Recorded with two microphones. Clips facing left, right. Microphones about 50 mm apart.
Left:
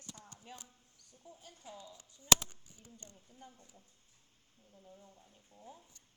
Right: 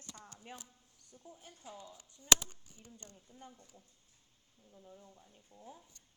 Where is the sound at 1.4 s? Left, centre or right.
Right.